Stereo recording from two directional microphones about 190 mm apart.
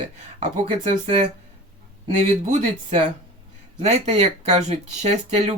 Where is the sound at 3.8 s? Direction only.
35° right (ahead or behind).